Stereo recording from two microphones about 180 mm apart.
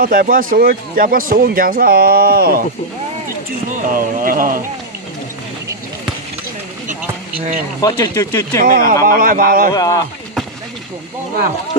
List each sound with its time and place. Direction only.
0.0 s speech: 50° right (ahead or behind)
3.7 s speech: 50° right (ahead or behind)
7.8 s speech: 20° left (ahead or behind)
8.6 s speech: 50° right (ahead or behind)
9.7 s speech: 20° left (ahead or behind)